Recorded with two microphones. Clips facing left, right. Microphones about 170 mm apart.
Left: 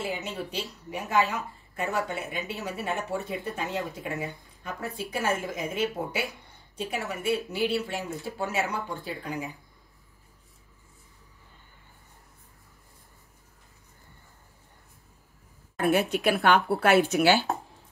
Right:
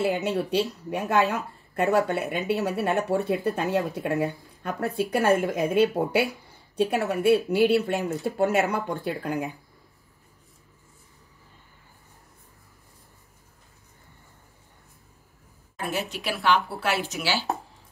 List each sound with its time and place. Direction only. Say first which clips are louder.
0.0 s speech: right 8 dB; 60° right (ahead or behind)
15.8 s speech: left 7 dB; 55° left (ahead or behind)